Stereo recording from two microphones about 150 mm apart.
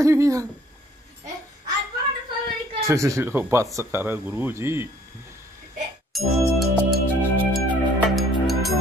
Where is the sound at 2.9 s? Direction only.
20° right (ahead or behind).